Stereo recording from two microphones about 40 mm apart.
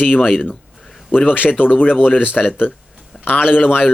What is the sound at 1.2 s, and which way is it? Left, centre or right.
Speech, left.